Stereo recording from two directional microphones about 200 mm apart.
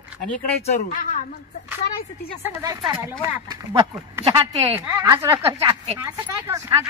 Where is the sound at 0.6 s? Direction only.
40° left (ahead or behind).